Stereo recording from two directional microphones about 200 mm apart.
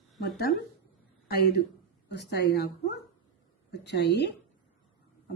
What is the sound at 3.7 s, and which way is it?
Speech, 55° left (ahead or behind).